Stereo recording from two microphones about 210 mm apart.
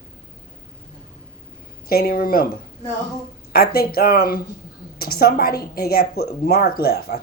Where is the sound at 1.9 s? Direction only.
45° left (ahead or behind).